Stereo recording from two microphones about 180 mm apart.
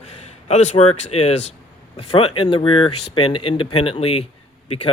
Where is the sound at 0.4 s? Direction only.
40° left (ahead or behind).